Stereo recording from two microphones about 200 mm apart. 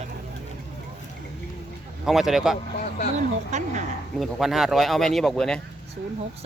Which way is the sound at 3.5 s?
35° right (ahead or behind).